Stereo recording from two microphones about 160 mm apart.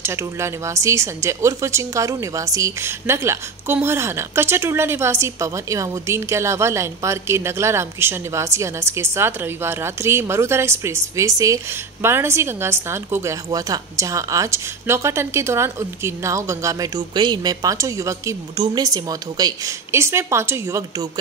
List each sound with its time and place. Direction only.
0.0 s a woman's voice: 15° right (ahead or behind)